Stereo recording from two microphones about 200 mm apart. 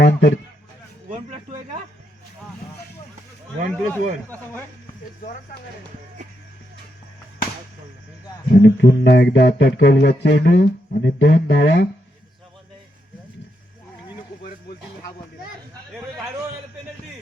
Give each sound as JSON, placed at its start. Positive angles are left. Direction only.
{"t": 0.0, "sound": "a man's voice", "side_deg": 55}
{"t": 3.7, "sound": "speech", "side_deg": 10}
{"t": 8.4, "sound": "a sound", "side_deg": 55}